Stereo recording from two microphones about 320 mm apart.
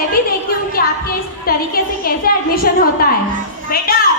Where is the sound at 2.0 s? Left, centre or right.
Left.